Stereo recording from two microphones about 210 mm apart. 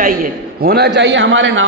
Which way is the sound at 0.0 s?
45° right (ahead or behind).